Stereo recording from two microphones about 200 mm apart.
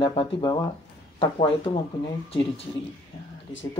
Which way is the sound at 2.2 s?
30° left (ahead or behind).